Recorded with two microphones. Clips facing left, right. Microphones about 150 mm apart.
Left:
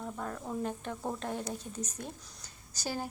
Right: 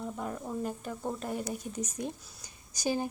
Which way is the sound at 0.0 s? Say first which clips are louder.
Right 2 dB; 15° right (ahead or behind).